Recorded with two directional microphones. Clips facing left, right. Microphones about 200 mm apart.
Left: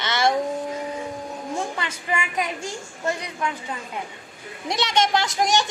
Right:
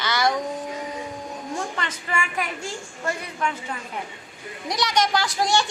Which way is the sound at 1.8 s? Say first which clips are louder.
Left 1 dB; 15° left (ahead or behind).